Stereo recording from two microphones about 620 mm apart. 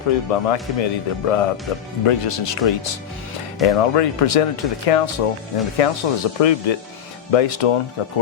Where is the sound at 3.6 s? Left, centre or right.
Left.